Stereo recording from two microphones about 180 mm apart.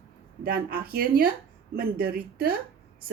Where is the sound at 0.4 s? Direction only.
55° right (ahead or behind).